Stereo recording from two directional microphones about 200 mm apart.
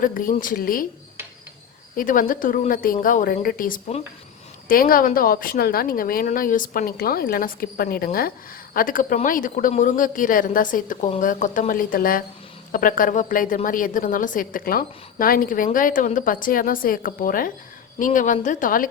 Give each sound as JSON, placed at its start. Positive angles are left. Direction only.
{"t": 0.0, "sound": "a woman's voice", "side_deg": 45}
{"t": 2.0, "sound": "a woman's voice", "side_deg": 45}